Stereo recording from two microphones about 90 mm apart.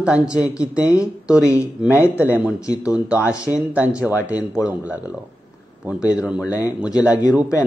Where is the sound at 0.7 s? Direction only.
10° right (ahead or behind).